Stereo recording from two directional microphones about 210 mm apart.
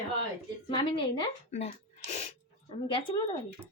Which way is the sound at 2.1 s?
25° left (ahead or behind).